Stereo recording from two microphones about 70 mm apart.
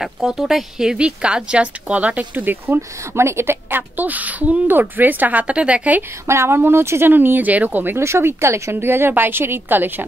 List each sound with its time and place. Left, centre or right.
0.0 s a woman's voice: centre
6.2 s speech: right
8.0 s speech: right